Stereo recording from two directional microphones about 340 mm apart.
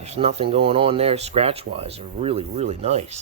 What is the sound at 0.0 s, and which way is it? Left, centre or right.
Speech, centre.